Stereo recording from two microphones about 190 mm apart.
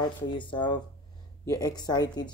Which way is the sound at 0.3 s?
25° left (ahead or behind).